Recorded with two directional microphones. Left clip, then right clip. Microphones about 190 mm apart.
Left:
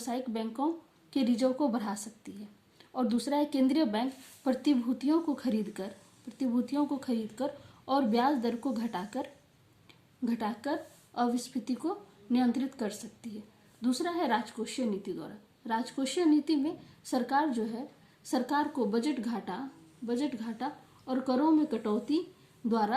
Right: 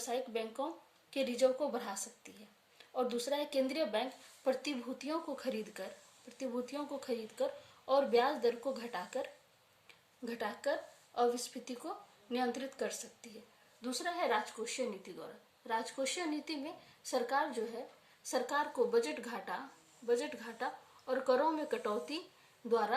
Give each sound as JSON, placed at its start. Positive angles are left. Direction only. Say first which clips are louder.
{"t": 0.0, "sound": "a woman's voice", "louder": "left 2 dB", "side_deg": 20}